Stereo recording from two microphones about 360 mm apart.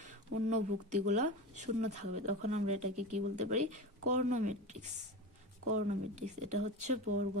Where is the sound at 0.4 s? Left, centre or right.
Centre.